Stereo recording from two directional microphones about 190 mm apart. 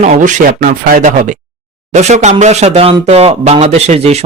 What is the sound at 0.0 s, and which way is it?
Speech, 40° right (ahead or behind).